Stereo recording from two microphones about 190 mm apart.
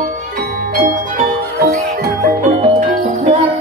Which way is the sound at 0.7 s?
45° right (ahead or behind).